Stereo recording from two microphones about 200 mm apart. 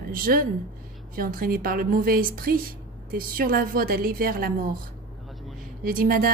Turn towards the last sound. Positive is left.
turn(degrees=-45)  # may be behind; listen again after turning